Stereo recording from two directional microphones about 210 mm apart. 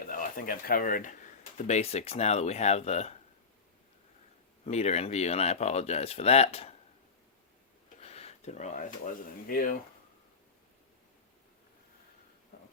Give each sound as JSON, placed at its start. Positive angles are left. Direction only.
{"t": 0.0, "sound": "speech", "side_deg": 40}
{"t": 4.6, "sound": "speech", "side_deg": 30}
{"t": 8.0, "sound": "speech", "side_deg": 30}